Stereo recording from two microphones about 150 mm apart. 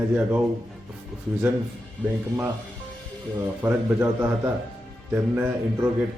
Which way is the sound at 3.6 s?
15° right (ahead or behind).